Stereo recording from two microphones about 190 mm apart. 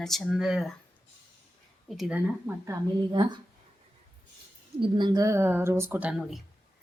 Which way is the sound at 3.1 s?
25° right (ahead or behind).